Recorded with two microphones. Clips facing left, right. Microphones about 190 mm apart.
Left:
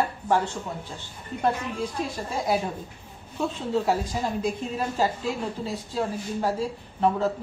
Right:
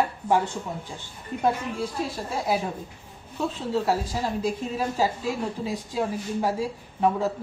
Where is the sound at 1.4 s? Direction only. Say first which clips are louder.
Right 1 dB; centre (ahead or behind).